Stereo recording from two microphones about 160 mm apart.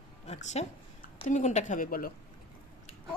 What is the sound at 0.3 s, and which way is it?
Speech, 45° left (ahead or behind).